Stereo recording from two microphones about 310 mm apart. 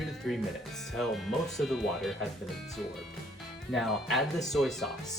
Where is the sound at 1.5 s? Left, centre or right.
Centre.